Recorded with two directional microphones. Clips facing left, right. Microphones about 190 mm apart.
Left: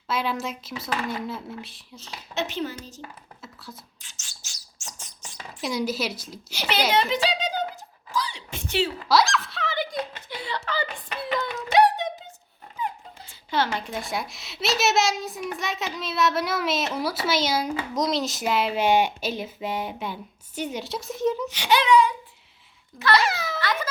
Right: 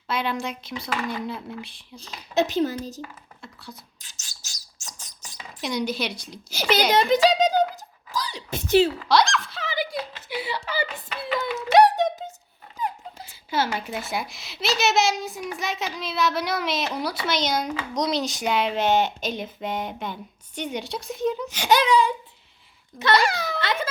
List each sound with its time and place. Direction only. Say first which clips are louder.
0.1 s a child's voice: even; centre (ahead or behind)
2.0 s speech: right 7 dB; 35° right (ahead or behind)
3.4 s speech: right 1 dB; centre (ahead or behind)
4.0 s bird: even; 40° right (ahead or behind)
5.6 s a child's voice: even; 5° left (ahead or behind)
6.5 s speech: right 4 dB; 40° right (ahead or behind)
6.9 s a sound: right 7 dB; 40° right (ahead or behind)
9.0 s a sound: right 1 dB; 5° left (ahead or behind)
12.8 s a sound: right 1 dB; 40° right (ahead or behind)
13.5 s a child's voice: even; 10° right (ahead or behind)
21.5 s speech: even; 45° right (ahead or behind)
23.1 s a child's voice: right 1 dB; centre (ahead or behind)
23.6 s baby cry: right 1 dB; 25° right (ahead or behind)